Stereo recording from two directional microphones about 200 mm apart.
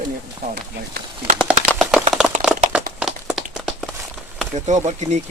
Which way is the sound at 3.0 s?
Centre (ahead or behind).